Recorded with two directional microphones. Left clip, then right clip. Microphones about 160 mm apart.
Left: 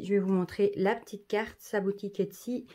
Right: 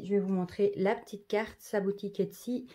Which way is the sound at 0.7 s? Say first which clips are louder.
Left 1 dB; 10° left (ahead or behind).